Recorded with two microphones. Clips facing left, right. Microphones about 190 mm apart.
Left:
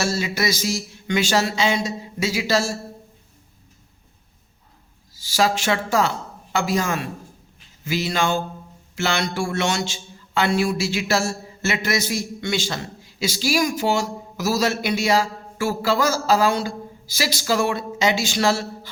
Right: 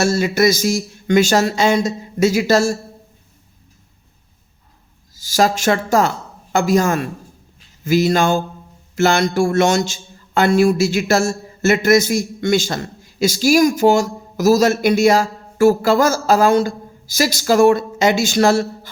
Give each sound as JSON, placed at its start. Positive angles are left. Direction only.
{"t": 0.0, "sound": "a man's voice", "side_deg": -50}
{"t": 5.1, "sound": "a woman's voice", "side_deg": -45}